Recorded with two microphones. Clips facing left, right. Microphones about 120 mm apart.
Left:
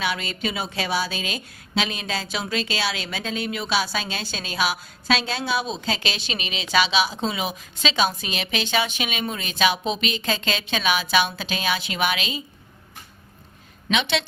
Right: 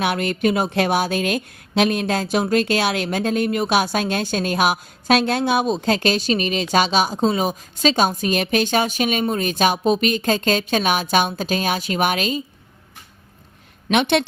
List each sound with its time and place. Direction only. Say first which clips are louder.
0.0 s a woman's voice: right 7 dB; 55° right (ahead or behind)
13.9 s a woman's voice: right 6 dB; 55° right (ahead or behind)